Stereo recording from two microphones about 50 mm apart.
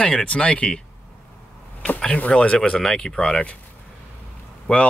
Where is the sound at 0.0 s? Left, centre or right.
Left.